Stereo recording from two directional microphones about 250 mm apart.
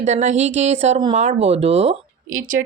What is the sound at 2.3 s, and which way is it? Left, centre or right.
Speech, right.